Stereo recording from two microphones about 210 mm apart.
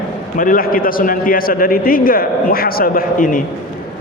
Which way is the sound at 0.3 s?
40° left (ahead or behind).